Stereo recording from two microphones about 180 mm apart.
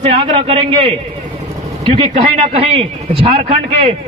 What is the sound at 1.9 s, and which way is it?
A man's voice, 30° right (ahead or behind).